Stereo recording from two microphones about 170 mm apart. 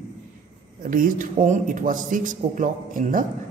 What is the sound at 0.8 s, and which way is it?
Speech, 55° right (ahead or behind).